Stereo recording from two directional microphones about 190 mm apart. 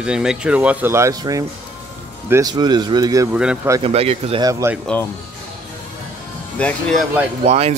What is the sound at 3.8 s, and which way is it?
Speech, 30° right (ahead or behind).